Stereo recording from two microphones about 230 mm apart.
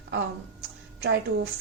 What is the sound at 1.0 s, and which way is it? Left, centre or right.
Speech, right.